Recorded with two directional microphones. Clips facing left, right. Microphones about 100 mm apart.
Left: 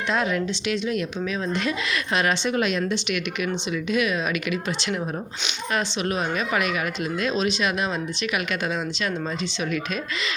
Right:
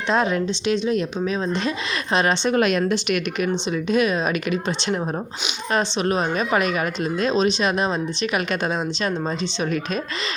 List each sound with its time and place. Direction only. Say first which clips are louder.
0.1 s speech: right 4 dB; 30° right (ahead or behind)
2.6 s speech: right 4 dB; 50° right (ahead or behind); by 4.2 s 35° right (ahead or behind)
5.7 s speech: right 4 dB; 35° right (ahead or behind)